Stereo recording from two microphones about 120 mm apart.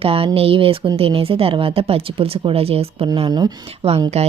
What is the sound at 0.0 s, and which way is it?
A woman's voice, 50° right (ahead or behind).